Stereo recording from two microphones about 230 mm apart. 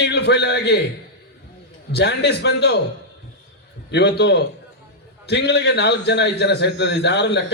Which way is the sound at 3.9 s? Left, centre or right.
Left.